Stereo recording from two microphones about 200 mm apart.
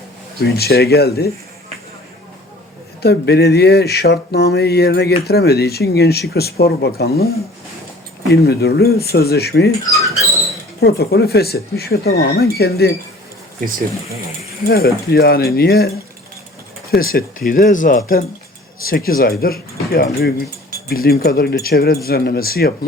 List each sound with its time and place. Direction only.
0.4 s speech: 50° left (ahead or behind)
3.0 s speech: 55° left (ahead or behind)
8.3 s speech: 55° left (ahead or behind)
10.8 s speech: 55° left (ahead or behind)
13.7 s speech: 45° right (ahead or behind)
14.7 s speech: 50° left (ahead or behind)
16.9 s speech: 45° left (ahead or behind)